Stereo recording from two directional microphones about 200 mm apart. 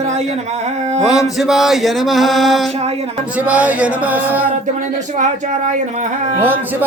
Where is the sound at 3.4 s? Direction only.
5° right (ahead or behind).